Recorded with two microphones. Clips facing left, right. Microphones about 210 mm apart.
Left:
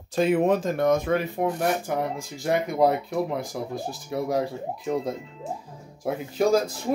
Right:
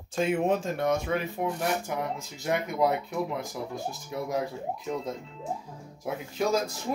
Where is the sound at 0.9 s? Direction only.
50° left (ahead or behind).